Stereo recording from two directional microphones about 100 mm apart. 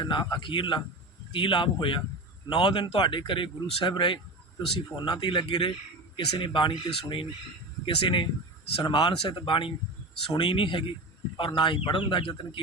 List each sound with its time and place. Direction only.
0.0 s a man's voice: 45° left (ahead or behind)